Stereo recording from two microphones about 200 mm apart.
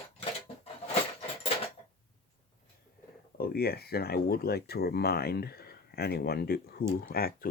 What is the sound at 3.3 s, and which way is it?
Speech, 50° left (ahead or behind).